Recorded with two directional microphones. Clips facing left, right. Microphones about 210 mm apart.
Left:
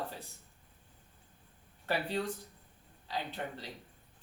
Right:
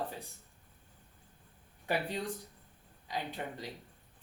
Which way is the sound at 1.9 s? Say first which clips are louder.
Left 1 dB; 15° right (ahead or behind).